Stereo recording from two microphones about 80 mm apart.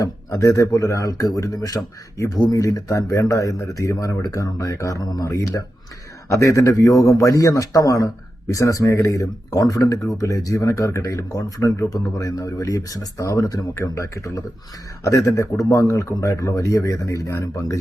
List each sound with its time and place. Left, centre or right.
0.3 s speech: left
13.7 s speech: left